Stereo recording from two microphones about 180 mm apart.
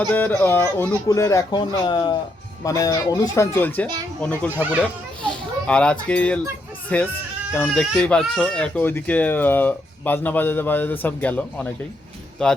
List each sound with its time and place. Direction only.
0.1 s a child's voice: 10° left (ahead or behind)